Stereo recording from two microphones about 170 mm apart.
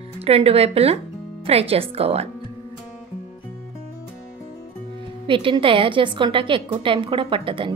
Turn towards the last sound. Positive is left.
turn(degrees=-30)  # may be behind; listen again after turning